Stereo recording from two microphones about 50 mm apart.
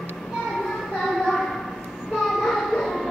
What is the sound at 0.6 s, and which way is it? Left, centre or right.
Child singing, centre.